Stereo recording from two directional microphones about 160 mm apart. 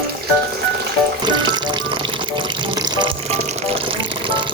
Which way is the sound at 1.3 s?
30° right (ahead or behind).